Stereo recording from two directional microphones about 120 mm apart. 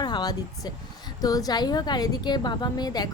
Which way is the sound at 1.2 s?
30° left (ahead or behind).